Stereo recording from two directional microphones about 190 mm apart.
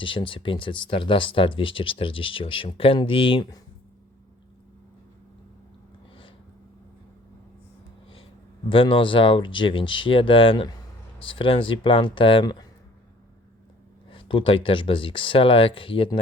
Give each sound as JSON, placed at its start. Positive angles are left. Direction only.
{"t": 0.0, "sound": "speech", "side_deg": 25}
{"t": 8.7, "sound": "speech", "side_deg": 25}
{"t": 14.1, "sound": "speech", "side_deg": 25}